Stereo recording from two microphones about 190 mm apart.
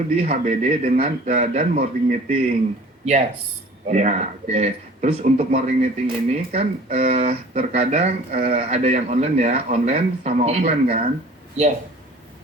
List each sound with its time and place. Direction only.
0.2 s speech: 35° right (ahead or behind)